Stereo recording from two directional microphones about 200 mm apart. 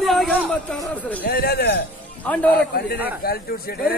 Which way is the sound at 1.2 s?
50° left (ahead or behind).